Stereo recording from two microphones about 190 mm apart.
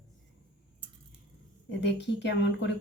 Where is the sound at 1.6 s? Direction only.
70° left (ahead or behind).